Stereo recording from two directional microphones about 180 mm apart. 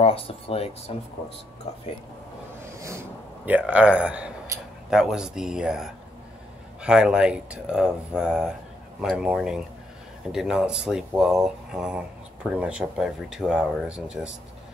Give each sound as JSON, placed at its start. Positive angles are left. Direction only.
{"t": 0.0, "sound": "speech", "side_deg": 30}
{"t": 3.4, "sound": "speech", "side_deg": -10}
{"t": 4.5, "sound": "a sound", "side_deg": -20}
{"t": 4.9, "sound": "speech", "side_deg": -5}